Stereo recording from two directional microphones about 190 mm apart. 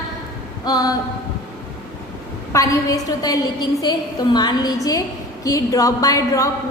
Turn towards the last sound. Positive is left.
turn(degrees=15)  # may be behind; listen again after turning